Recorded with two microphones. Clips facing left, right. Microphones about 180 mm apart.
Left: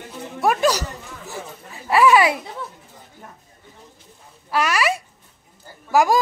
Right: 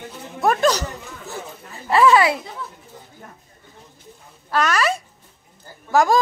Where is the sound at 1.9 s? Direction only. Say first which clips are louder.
Even; 10° left (ahead or behind).